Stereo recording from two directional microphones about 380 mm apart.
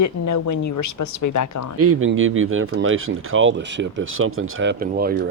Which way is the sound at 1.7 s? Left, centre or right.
Right.